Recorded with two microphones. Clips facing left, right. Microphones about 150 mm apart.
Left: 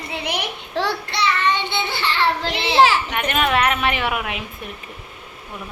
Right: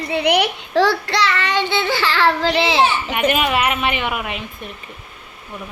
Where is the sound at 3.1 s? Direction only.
5° right (ahead or behind).